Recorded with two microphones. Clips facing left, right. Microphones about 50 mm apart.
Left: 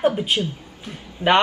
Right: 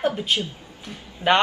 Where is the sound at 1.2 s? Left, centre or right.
Right.